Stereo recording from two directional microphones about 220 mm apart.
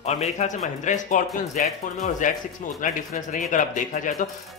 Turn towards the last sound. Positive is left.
turn(degrees=35)  # may be behind; listen again after turning